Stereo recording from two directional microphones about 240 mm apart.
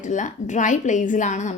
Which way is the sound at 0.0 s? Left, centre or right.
Left.